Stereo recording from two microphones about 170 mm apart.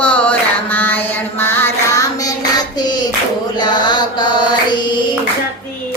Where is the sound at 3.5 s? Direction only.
25° left (ahead or behind).